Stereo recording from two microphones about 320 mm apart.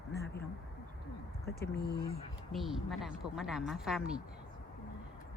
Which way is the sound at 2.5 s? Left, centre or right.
Centre.